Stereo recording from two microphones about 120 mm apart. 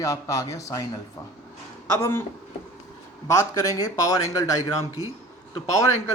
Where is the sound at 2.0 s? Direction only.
20° left (ahead or behind).